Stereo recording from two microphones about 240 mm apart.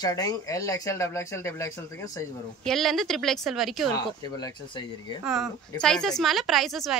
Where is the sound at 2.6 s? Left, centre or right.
Centre.